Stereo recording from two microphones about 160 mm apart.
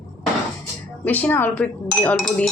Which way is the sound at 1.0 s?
10° left (ahead or behind).